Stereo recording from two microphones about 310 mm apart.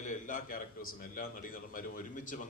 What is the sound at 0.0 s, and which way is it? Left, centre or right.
A man's voice, left.